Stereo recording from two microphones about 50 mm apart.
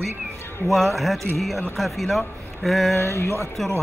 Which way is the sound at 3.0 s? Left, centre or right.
Left.